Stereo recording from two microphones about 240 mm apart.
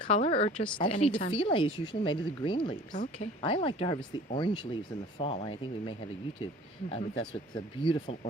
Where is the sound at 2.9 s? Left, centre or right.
Left.